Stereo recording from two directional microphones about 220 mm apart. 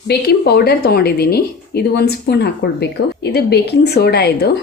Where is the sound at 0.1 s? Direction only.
45° left (ahead or behind).